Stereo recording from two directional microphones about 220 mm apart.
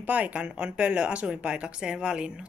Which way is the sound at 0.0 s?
5° right (ahead or behind).